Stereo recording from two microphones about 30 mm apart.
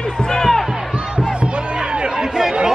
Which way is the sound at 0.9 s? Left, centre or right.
Right.